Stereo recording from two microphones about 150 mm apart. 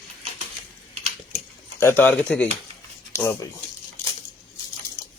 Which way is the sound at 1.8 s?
15° left (ahead or behind).